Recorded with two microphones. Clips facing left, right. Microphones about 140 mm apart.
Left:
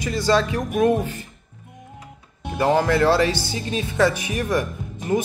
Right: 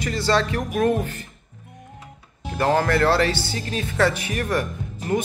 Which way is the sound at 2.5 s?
15° left (ahead or behind).